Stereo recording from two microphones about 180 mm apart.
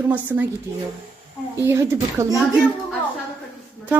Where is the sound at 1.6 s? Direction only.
15° right (ahead or behind).